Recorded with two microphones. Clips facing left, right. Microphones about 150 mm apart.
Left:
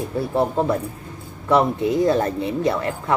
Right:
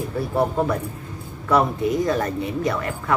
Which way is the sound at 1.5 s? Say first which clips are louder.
Left 2 dB; 25° left (ahead or behind).